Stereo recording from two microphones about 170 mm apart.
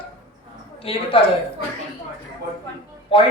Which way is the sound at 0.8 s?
35° left (ahead or behind).